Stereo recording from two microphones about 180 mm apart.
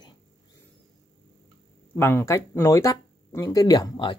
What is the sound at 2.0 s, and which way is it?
Speech, 10° left (ahead or behind).